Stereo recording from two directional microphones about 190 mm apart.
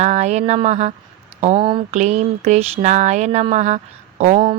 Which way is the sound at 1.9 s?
35° right (ahead or behind).